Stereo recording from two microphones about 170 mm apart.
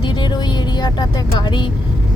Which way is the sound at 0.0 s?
25° left (ahead or behind).